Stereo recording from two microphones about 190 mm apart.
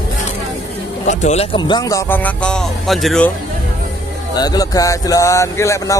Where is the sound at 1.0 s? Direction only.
35° left (ahead or behind); by 3.3 s centre (ahead or behind).